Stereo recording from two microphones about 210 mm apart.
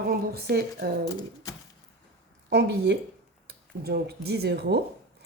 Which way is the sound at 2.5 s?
50° right (ahead or behind).